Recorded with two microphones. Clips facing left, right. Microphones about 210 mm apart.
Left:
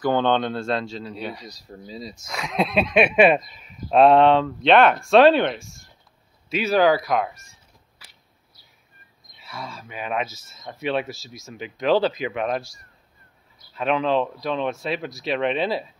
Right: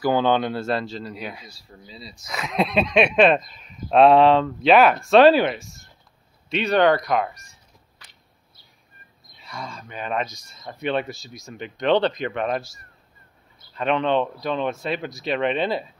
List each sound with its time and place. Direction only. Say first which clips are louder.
0.0 s speech: right 1 dB; 5° right (ahead or behind)
1.5 s speech: left 7 dB; 40° left (ahead or behind)
2.2 s speech: right 1 dB; centre (ahead or behind)
8.0 s a sound: left 1 dB; 5° left (ahead or behind)
9.4 s speech: even; centre (ahead or behind)
13.7 s speech: even; centre (ahead or behind)